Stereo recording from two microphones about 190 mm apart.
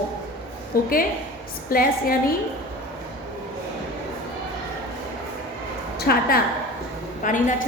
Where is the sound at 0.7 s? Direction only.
50° left (ahead or behind).